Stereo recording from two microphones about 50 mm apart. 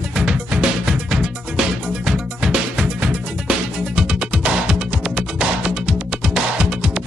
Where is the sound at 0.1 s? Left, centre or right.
Centre.